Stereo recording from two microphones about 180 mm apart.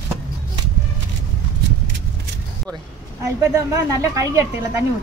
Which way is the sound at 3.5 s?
15° right (ahead or behind).